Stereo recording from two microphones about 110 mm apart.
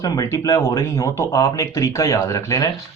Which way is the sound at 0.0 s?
30° left (ahead or behind).